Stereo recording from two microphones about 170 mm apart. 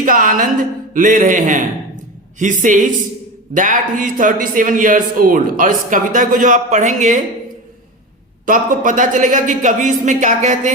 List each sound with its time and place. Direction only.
0.0 s a man's voice: 50° right (ahead or behind)
8.4 s a man's voice: 50° right (ahead or behind)